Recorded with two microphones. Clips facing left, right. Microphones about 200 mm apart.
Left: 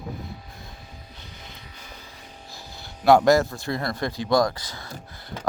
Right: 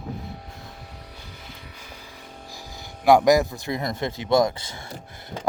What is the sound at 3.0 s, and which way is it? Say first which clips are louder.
A man's voice: even; 15° right (ahead or behind).